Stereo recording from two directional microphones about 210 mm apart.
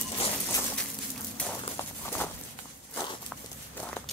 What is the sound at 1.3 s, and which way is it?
Walk, 10° left (ahead or behind).